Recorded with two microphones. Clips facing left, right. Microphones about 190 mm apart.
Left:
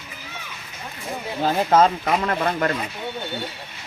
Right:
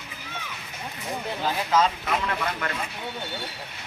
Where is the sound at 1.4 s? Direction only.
50° left (ahead or behind).